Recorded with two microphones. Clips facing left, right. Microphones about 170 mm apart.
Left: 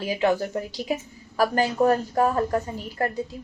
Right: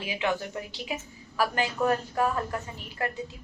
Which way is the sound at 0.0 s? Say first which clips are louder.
Left 7 dB; 40° left (ahead or behind).